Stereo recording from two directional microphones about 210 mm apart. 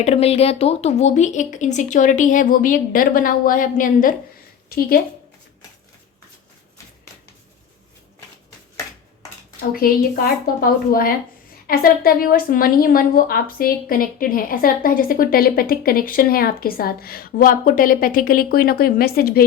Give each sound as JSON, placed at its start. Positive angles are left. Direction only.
{"t": 0.0, "sound": "a woman's voice", "side_deg": 30}
{"t": 9.8, "sound": "a woman's voice", "side_deg": 45}